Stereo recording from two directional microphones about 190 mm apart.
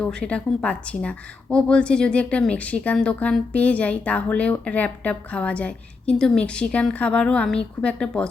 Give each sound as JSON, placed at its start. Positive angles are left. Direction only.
{"t": 0.0, "sound": "speech", "side_deg": 5}